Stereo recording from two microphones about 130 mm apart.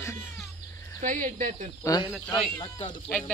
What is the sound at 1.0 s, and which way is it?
Speech, 90° right.